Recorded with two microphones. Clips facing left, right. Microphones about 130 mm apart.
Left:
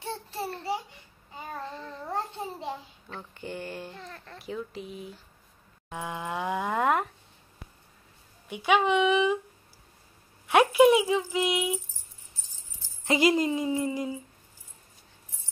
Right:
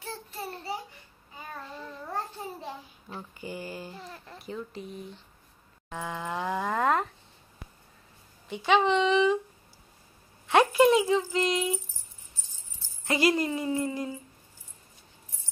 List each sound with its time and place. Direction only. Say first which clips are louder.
0.1 s a sound: left 4 dB; 30° left (ahead or behind)
1.7 s babbling: left 2 dB; 15° right (ahead or behind)
3.1 s speech: even; 5° right (ahead or behind); by 7.1 s 10° left (ahead or behind)
8.5 s speech: even; 10° left (ahead or behind)
10.4 s speech: left 2 dB; 10° left (ahead or behind)
13.0 s speech: left 2 dB; 20° left (ahead or behind)